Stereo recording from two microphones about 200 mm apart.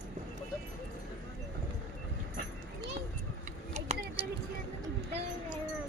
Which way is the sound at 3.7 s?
35° right (ahead or behind).